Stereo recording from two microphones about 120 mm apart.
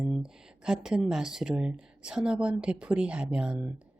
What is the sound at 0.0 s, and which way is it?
A woman's voice, 5° right (ahead or behind).